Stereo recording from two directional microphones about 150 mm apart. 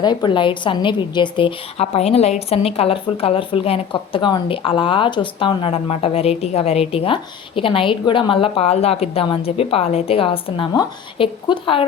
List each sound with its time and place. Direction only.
0.0 s a woman's voice: 30° left (ahead or behind)